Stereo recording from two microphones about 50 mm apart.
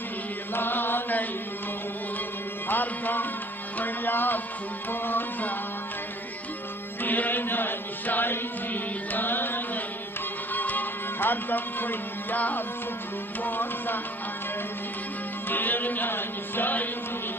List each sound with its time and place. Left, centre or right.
0.6 s mantra: left
2.7 s music: left
7.0 s a sound: left
10.5 s music: left
15.4 s music: left